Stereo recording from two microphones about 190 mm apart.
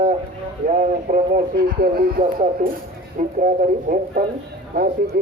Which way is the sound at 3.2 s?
40° right (ahead or behind).